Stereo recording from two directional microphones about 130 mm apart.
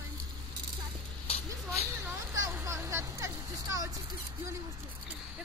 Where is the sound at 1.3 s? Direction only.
50° left (ahead or behind).